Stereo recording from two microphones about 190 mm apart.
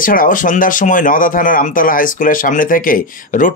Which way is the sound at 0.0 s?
45° left (ahead or behind).